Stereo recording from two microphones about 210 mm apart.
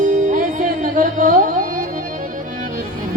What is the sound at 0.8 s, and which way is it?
Music, 40° right (ahead or behind).